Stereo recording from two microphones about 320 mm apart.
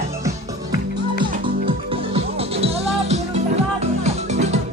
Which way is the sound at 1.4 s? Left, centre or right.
Centre.